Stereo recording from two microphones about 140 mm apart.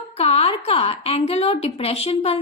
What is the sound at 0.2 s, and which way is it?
A woman's voice, 45° left (ahead or behind).